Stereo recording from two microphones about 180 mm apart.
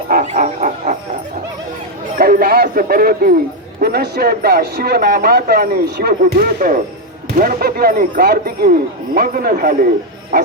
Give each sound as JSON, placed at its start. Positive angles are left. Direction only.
{"t": 0.1, "sound": "music", "side_deg": -45}
{"t": 2.1, "sound": "a sound", "side_deg": -55}
{"t": 3.8, "sound": "a man's voice", "side_deg": -60}